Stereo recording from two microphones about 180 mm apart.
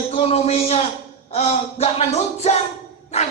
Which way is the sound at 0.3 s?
35° left (ahead or behind).